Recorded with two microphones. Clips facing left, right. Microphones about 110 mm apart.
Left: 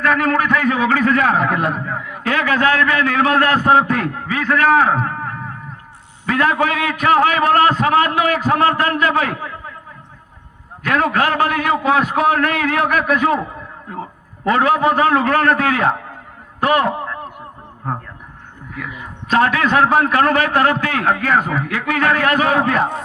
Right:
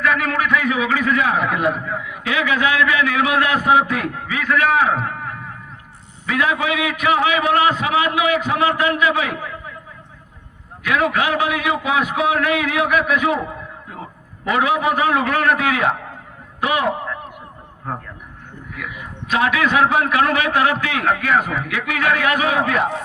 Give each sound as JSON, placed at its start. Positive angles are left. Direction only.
{"t": 0.0, "sound": "a man's voice", "side_deg": 35}
{"t": 5.0, "sound": "a sound", "side_deg": 40}
{"t": 6.2, "sound": "a man's voice", "side_deg": 40}
{"t": 10.8, "sound": "a man's voice", "side_deg": 35}
{"t": 14.4, "sound": "a man's voice", "side_deg": 35}
{"t": 18.7, "sound": "a man's voice", "side_deg": 30}